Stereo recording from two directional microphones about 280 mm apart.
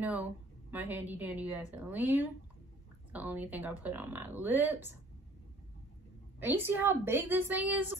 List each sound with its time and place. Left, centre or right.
0.0 s a woman's voice: centre
6.4 s a woman's voice: centre